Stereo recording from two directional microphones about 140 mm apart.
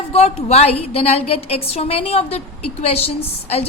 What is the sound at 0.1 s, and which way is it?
A woman's voice, 45° left (ahead or behind).